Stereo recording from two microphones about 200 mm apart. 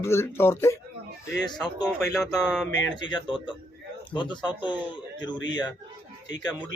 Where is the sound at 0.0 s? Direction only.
10° left (ahead or behind).